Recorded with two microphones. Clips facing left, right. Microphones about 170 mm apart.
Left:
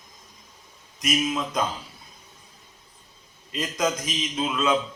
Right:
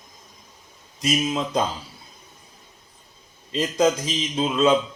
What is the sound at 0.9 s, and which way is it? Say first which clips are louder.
Speech: right 2 dB; 30° right (ahead or behind).